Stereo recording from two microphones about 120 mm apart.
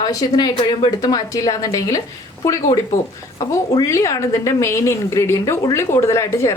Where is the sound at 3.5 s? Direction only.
25° left (ahead or behind).